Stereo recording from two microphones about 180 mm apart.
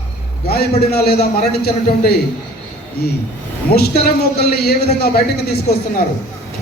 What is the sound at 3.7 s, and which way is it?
A man's voice, 60° left (ahead or behind).